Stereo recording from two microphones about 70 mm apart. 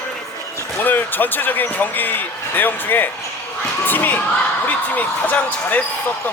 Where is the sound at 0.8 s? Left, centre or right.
Left.